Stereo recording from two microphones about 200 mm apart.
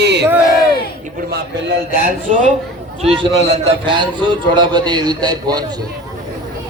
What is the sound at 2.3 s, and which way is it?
A man's voice, 35° right (ahead or behind).